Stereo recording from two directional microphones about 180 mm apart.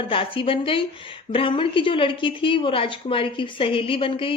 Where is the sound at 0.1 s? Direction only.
30° left (ahead or behind).